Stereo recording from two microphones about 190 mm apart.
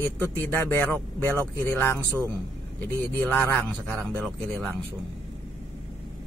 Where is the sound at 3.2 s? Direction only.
10° left (ahead or behind).